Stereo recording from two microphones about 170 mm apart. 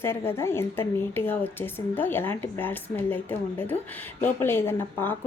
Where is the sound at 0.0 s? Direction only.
15° left (ahead or behind).